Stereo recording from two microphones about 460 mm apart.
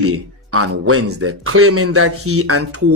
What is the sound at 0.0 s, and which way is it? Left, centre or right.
Speech, right.